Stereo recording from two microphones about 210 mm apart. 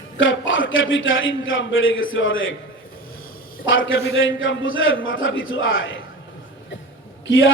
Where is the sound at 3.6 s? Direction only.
65° left (ahead or behind).